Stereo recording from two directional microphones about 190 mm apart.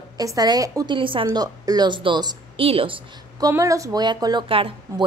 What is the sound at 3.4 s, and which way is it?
A woman's voice, 15° right (ahead or behind).